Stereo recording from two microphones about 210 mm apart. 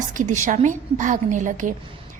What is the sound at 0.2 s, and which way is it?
A woman's voice, 35° right (ahead or behind).